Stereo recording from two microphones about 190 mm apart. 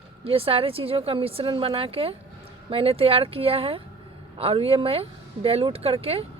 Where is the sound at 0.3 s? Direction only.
30° right (ahead or behind).